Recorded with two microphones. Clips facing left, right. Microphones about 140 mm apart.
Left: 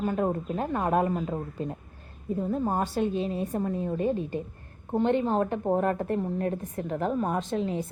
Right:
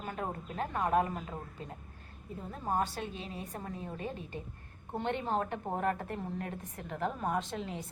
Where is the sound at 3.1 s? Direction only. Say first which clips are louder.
Left 13 dB; 45° left (ahead or behind).